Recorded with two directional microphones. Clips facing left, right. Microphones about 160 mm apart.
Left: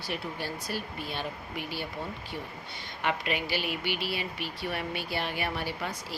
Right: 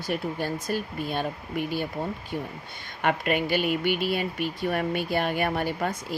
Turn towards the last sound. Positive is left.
turn(degrees=-50)  # may be behind; listen again after turning